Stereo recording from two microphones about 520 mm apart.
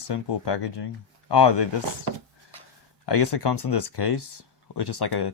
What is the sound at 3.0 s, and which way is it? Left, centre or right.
Speech, left.